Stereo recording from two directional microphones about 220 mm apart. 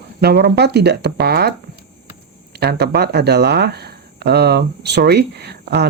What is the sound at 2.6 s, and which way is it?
Speech, 45° right (ahead or behind).